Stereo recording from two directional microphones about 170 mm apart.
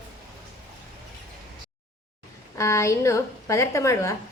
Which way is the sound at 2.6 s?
15° left (ahead or behind).